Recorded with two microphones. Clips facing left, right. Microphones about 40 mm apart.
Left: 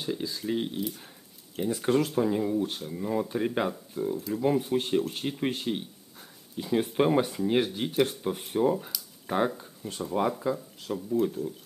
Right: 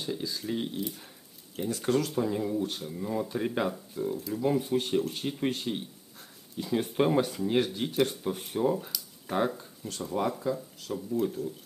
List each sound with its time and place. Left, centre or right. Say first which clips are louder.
0.0 s speech: left 2 dB; centre